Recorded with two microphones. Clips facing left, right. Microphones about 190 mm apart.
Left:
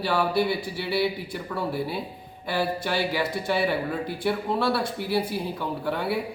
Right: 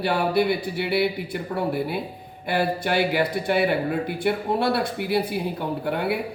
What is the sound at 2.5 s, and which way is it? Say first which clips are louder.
Speech: right 3 dB; 55° right (ahead or behind).